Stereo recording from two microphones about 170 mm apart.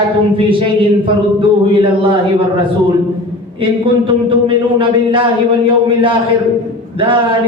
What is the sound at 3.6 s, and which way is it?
Speech, 30° right (ahead or behind).